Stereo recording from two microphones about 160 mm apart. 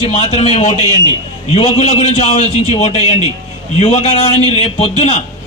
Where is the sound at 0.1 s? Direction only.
40° left (ahead or behind).